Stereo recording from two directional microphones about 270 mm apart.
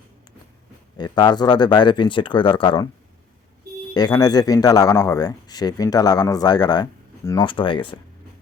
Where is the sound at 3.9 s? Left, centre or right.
Centre.